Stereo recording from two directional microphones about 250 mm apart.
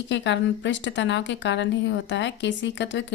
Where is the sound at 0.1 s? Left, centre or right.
Left.